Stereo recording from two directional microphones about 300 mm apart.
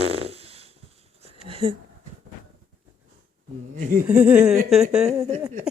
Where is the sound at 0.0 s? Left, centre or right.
Centre.